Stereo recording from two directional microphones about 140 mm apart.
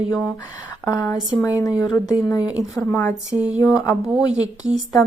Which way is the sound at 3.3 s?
10° right (ahead or behind).